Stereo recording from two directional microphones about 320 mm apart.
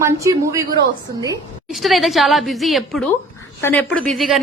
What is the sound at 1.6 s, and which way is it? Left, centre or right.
A woman's voice, centre.